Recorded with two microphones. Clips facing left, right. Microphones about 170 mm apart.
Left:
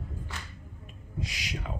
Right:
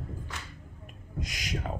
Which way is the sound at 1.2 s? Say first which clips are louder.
Right 1 dB; 45° right (ahead or behind).